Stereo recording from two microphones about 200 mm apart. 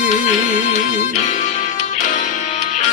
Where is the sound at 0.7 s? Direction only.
40° left (ahead or behind).